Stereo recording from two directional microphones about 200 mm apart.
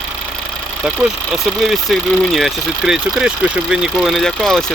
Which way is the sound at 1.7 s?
Centre (ahead or behind).